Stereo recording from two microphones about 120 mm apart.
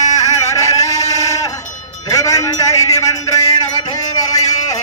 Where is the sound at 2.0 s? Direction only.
30° left (ahead or behind).